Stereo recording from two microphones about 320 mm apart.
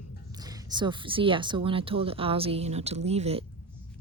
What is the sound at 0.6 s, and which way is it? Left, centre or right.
Speech, centre.